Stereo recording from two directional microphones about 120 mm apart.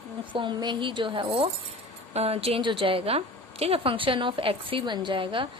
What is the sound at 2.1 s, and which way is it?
A woman's voice, 60° right (ahead or behind).